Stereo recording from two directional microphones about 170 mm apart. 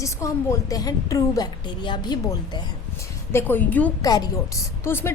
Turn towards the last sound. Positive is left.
turn(degrees=15)  # may be behind; listen again after turning